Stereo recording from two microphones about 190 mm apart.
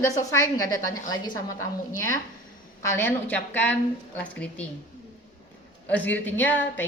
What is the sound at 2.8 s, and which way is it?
A woman's voice, 15° left (ahead or behind).